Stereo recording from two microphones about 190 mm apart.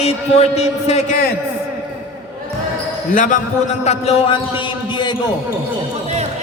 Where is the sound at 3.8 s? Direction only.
35° left (ahead or behind).